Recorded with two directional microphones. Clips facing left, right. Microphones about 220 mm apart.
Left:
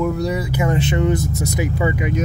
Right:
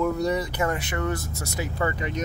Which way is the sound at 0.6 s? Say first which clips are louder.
Left 8 dB; 25° left (ahead or behind).